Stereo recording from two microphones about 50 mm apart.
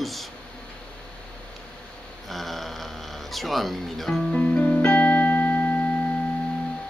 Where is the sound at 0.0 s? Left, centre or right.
Centre.